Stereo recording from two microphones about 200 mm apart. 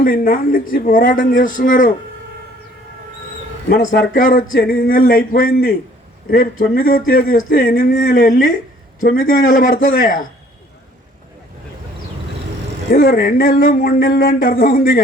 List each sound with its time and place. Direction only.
0.0 s speech: 45° left (ahead or behind)
4.1 s speech: 45° left (ahead or behind)
6.7 s speech: 45° left (ahead or behind)
12.9 s speech: 45° left (ahead or behind)